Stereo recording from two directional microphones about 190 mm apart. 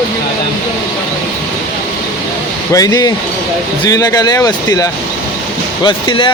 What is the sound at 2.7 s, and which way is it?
Speech, 20° left (ahead or behind).